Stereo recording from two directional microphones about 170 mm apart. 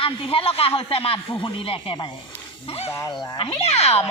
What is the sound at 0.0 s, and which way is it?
Speech, 30° left (ahead or behind).